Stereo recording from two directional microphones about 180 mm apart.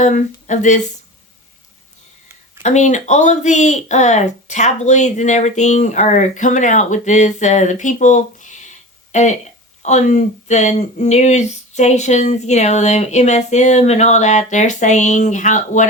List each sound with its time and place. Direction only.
0.0 s speech: 45° left (ahead or behind)
2.6 s speech: 40° left (ahead or behind)